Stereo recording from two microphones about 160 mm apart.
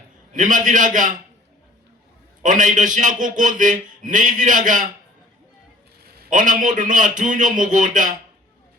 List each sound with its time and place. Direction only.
0.3 s a man's voice: 50° right (ahead or behind)
2.4 s a man's voice: 50° right (ahead or behind)
6.0 s a man's voice: 55° right (ahead or behind)